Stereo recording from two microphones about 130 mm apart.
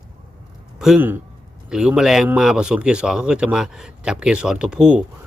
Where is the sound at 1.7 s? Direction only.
5° right (ahead or behind).